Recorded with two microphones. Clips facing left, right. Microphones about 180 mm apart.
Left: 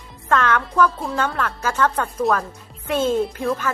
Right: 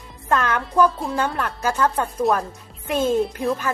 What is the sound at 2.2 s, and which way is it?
Speech, centre (ahead or behind).